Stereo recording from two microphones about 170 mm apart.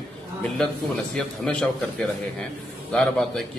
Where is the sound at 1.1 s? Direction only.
5° left (ahead or behind).